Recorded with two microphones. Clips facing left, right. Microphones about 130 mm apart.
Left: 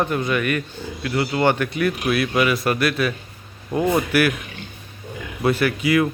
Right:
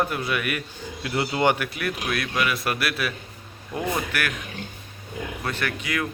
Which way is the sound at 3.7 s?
25° left (ahead or behind).